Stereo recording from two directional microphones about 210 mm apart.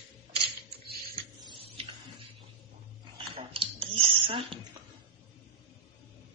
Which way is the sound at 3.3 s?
25° right (ahead or behind).